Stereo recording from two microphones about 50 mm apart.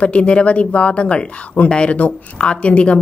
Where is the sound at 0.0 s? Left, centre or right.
Left.